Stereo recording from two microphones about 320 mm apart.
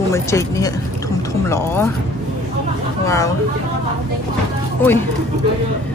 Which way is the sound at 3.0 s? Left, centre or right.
Centre.